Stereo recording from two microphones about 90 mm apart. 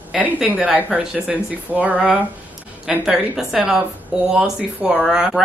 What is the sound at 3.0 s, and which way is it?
A woman's voice, 5° right (ahead or behind).